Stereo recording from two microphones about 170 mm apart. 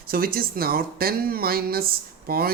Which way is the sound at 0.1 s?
60° right (ahead or behind).